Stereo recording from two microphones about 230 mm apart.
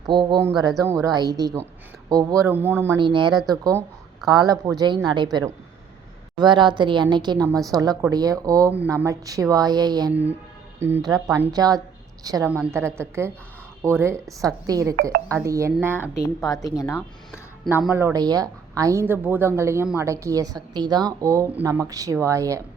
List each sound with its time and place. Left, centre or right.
0.0 s a woman's voice: centre
3.7 s a sound: centre
4.3 s a woman's voice: centre
16.6 s speech: centre
17.6 s a woman's voice: centre